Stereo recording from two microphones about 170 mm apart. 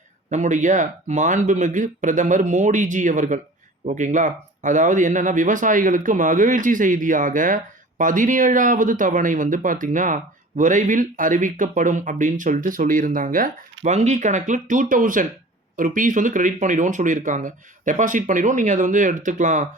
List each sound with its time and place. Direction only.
0.3 s speech: 45° right (ahead or behind)
13.8 s speech: 45° right (ahead or behind)